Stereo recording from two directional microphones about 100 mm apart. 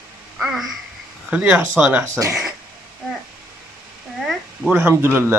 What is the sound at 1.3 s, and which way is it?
Speech, 15° right (ahead or behind).